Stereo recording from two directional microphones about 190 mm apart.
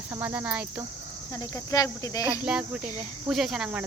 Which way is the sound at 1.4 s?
20° left (ahead or behind).